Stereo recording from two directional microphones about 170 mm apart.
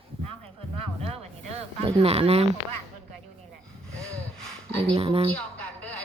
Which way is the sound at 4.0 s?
5° left (ahead or behind).